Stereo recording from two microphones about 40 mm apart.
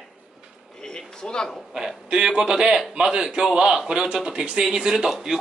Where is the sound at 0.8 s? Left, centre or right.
Centre.